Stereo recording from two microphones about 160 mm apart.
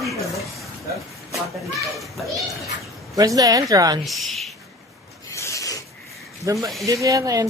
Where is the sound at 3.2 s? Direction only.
20° right (ahead or behind).